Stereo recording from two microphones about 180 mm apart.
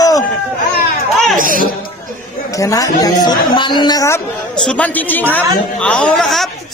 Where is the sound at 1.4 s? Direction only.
50° right (ahead or behind).